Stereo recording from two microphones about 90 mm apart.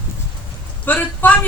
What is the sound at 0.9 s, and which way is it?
Speech, 20° left (ahead or behind).